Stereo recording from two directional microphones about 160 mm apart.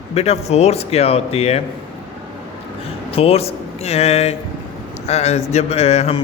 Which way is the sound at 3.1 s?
40° left (ahead or behind).